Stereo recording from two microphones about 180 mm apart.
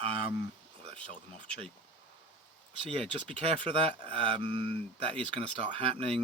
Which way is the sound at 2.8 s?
30° right (ahead or behind).